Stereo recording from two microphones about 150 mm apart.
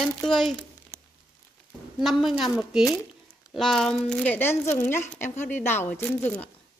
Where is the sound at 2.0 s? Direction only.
Centre (ahead or behind).